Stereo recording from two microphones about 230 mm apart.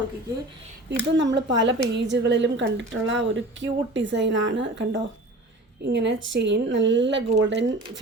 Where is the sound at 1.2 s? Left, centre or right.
Right.